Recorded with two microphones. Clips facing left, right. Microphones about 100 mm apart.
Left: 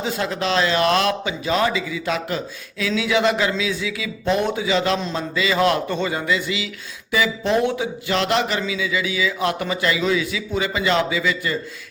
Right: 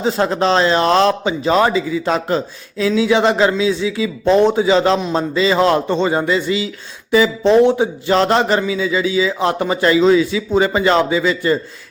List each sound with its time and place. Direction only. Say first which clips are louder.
0.0 s a man's voice: right 7 dB; 35° right (ahead or behind)
7.8 s a man's voice: right 7 dB; 35° right (ahead or behind)